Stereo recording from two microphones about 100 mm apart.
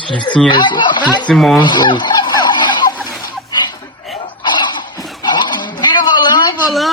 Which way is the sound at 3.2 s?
40° left (ahead or behind).